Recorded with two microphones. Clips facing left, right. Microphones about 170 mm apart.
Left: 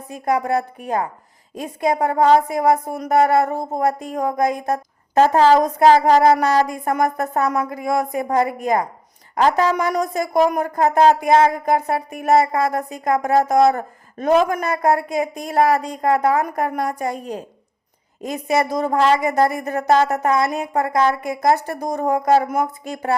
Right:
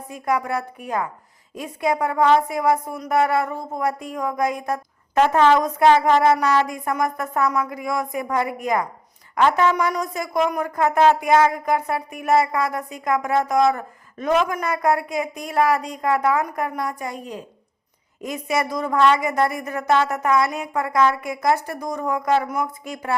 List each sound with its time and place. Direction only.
0.1 s speech: 35° left (ahead or behind)
7.7 s speech: 30° left (ahead or behind)